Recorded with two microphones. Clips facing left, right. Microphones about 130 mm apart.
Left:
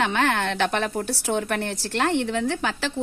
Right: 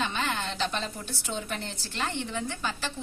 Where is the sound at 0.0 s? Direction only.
70° left (ahead or behind).